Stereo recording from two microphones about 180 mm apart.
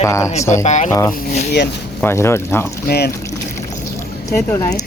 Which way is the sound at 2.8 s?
65° left (ahead or behind).